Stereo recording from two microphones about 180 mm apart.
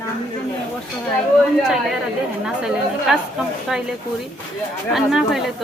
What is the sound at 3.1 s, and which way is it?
Speech, 5° right (ahead or behind).